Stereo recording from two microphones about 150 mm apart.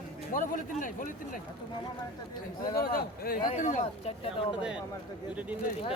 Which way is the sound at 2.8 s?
85° left.